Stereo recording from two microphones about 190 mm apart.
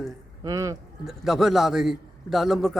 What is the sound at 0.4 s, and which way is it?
Speech, 20° right (ahead or behind).